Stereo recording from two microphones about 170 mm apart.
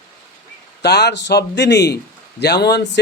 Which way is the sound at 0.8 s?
80° left.